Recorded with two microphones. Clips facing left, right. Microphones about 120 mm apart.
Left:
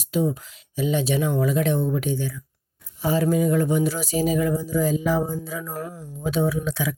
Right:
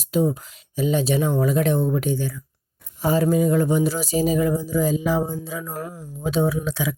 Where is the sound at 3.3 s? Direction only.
30° right (ahead or behind).